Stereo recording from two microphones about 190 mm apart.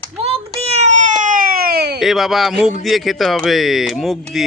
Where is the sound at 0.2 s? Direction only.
35° right (ahead or behind); by 2.0 s 55° right (ahead or behind).